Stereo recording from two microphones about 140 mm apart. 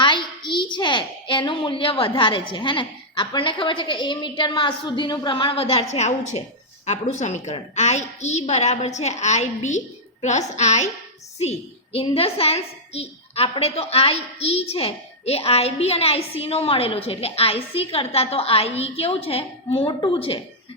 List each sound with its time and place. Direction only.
0.0 s a woman's voice: 35° left (ahead or behind)